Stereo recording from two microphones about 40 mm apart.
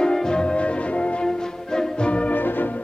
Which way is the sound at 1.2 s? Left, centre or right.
Centre.